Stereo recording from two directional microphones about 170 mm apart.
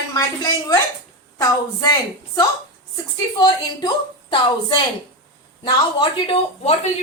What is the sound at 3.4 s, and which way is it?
A woman's voice, 30° left (ahead or behind).